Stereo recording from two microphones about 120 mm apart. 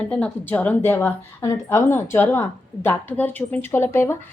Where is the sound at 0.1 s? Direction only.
10° left (ahead or behind).